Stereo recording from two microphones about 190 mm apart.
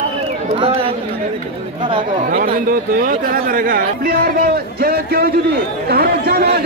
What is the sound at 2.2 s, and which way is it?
Speech, 50° right (ahead or behind).